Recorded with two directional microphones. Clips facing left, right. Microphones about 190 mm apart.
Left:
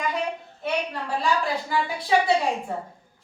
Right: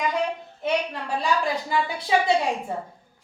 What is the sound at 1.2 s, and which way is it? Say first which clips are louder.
Speech: right 1 dB; 15° right (ahead or behind).